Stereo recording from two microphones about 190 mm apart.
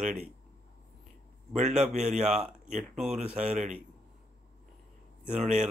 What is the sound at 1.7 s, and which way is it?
Speech, centre (ahead or behind).